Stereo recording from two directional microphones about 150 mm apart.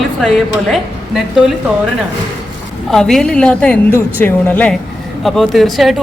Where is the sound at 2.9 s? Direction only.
5° left (ahead or behind).